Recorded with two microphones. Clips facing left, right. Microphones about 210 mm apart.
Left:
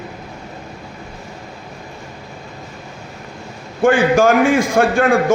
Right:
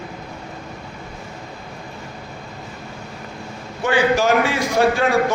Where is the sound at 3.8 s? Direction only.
50° left (ahead or behind).